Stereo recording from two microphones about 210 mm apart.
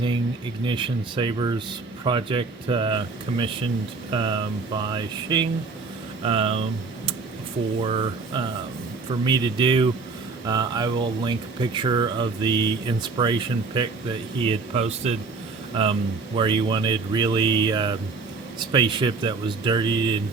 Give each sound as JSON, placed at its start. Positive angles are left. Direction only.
{"t": 0.6, "sound": "speech", "side_deg": -25}